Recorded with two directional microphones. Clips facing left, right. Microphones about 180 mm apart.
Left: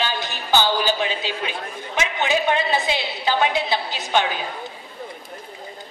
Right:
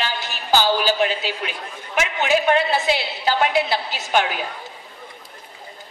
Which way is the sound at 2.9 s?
20° left (ahead or behind).